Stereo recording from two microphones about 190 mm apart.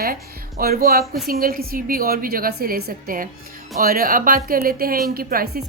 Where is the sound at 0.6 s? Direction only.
55° right (ahead or behind).